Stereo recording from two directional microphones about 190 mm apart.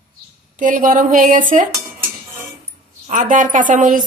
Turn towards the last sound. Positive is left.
turn(degrees=-45)  # may be behind; listen again after turning